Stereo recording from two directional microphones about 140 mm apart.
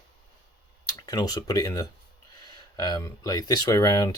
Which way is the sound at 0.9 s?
25° left (ahead or behind).